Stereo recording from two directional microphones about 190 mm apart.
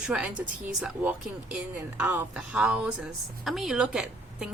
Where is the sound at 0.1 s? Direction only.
5° right (ahead or behind).